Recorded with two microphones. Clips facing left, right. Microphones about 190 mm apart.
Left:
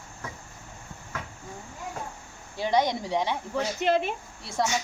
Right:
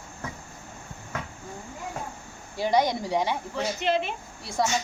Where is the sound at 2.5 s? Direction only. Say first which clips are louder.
Right 1 dB; 5° right (ahead or behind).